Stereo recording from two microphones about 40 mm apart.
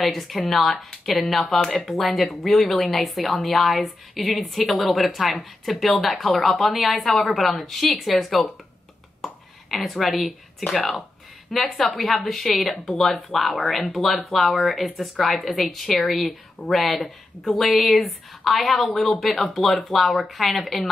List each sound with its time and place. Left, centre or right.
0.0 s a woman's voice: centre
1.6 s speech: centre
1.9 s a woman's voice: centre
9.2 s a sound: centre
11.5 s a woman's voice: centre